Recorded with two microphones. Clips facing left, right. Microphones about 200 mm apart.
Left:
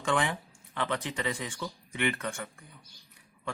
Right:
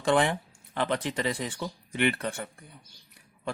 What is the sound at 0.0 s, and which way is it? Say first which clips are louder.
Speech: right 5 dB; 35° right (ahead or behind).